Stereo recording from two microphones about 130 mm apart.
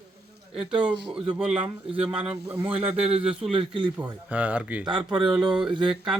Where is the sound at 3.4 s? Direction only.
45° right (ahead or behind).